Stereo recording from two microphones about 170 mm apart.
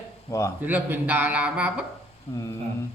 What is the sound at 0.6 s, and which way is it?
A man's voice, 10° right (ahead or behind).